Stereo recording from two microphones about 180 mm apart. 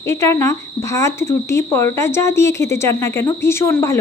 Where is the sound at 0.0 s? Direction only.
15° left (ahead or behind).